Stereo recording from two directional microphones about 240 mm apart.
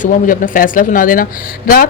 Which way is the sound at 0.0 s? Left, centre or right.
Left.